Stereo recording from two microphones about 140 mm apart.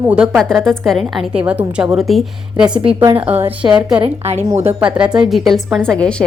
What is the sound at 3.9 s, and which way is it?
Speech, 45° right (ahead or behind).